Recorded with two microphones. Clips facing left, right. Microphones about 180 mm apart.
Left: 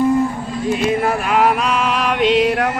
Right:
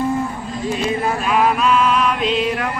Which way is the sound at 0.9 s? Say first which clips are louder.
Left 1 dB; 70° left (ahead or behind).